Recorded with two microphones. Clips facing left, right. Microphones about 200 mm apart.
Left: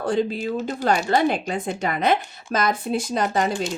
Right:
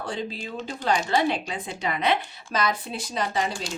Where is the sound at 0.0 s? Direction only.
50° left (ahead or behind).